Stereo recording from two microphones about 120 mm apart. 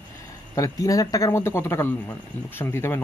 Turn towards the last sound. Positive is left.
turn(degrees=20)  # may be behind; listen again after turning